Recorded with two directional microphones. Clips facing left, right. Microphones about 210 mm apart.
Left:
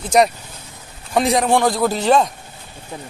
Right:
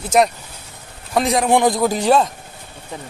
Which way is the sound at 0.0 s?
5° right (ahead or behind).